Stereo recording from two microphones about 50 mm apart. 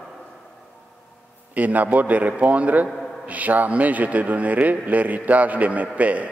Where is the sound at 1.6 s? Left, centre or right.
Right.